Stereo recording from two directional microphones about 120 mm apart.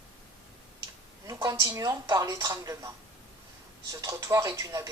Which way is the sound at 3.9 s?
25° right (ahead or behind).